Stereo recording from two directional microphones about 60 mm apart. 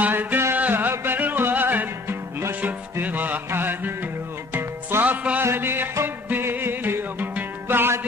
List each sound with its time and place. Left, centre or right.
0.0 s music: right
5.0 s music: right
5.4 s music: right